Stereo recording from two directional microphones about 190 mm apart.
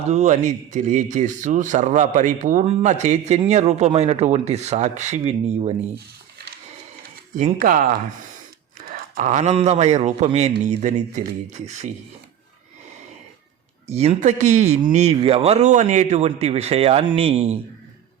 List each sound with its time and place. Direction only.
0.1 s speech: 40° right (ahead or behind)
7.3 s speech: 45° right (ahead or behind)
8.9 s speech: 45° right (ahead or behind)
13.8 s speech: 35° right (ahead or behind)